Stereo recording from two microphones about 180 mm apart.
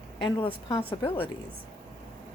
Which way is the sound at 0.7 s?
30° left (ahead or behind).